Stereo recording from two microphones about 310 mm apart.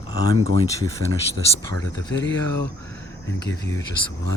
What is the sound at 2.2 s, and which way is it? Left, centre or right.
Speech, left.